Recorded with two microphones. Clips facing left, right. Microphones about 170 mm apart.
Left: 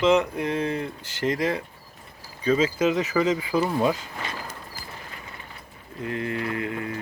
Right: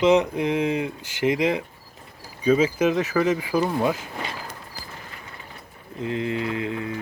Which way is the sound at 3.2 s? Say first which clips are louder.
Right 1 dB; 5° left (ahead or behind).